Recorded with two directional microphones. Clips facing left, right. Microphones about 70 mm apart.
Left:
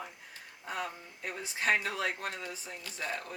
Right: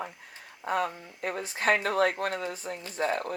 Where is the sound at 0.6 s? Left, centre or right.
Right.